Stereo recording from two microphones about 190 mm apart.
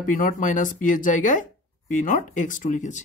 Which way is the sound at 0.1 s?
45° left (ahead or behind).